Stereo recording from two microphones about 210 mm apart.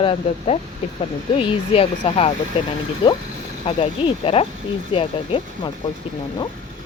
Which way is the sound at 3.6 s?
25° left (ahead or behind).